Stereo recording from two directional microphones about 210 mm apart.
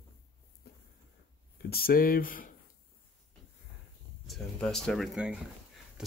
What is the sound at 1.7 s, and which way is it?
Speech, 45° left (ahead or behind).